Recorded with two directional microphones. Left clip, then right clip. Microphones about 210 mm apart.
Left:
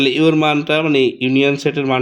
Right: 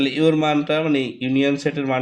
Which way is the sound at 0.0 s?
50° left (ahead or behind).